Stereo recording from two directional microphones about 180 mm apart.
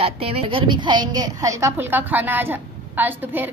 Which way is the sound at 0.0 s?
35° right (ahead or behind).